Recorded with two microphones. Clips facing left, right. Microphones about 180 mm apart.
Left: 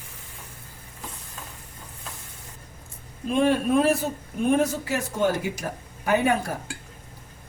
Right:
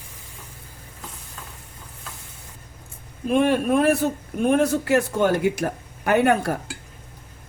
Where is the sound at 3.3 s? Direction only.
60° right (ahead or behind).